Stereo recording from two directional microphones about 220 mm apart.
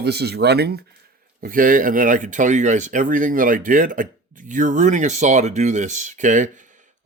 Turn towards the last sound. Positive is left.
turn(degrees=-35)  # may be behind; listen again after turning